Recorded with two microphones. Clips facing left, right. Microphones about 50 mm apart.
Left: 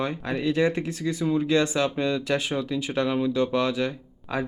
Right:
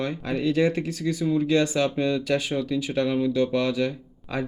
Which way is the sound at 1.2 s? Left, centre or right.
Left.